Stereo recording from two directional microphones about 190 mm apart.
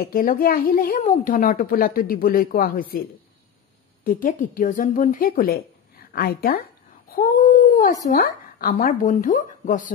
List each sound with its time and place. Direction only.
0.0 s a woman's voice: 50° left (ahead or behind)
4.0 s a woman's voice: 45° left (ahead or behind)
7.7 s a woman's voice: 45° left (ahead or behind)